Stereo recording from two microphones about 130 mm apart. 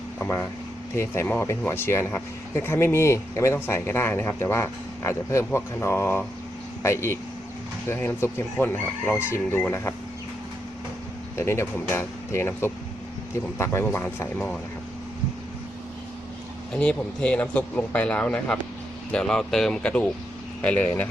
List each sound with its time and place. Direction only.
0.2 s speech: 10° left (ahead or behind)
11.3 s speech: 20° left (ahead or behind)
16.7 s speech: 10° left (ahead or behind)